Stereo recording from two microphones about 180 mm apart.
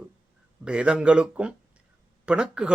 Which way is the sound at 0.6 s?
5° right (ahead or behind).